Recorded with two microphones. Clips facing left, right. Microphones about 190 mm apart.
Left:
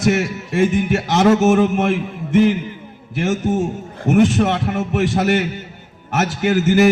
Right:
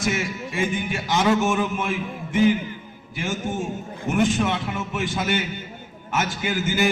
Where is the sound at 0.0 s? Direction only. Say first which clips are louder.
Left 8 dB; 70° left (ahead or behind).